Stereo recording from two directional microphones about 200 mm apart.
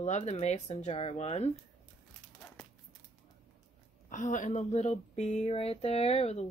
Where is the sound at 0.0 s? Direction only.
35° left (ahead or behind).